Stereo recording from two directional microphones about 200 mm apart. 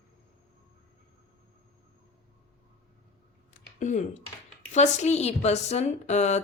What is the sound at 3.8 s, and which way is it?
Speech, 35° left (ahead or behind).